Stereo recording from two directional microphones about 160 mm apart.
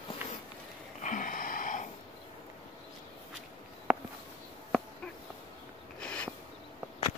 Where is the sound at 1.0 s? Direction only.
55° left (ahead or behind).